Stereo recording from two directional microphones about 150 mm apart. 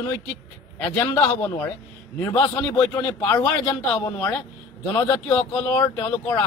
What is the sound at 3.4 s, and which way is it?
Speech, 10° left (ahead or behind).